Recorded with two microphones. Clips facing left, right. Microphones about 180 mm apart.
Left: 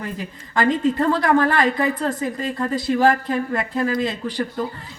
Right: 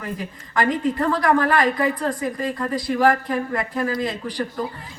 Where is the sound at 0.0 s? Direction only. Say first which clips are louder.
Even; 25° left (ahead or behind).